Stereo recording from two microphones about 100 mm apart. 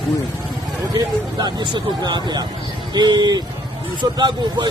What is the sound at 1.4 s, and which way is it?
A man's voice, 45° right (ahead or behind).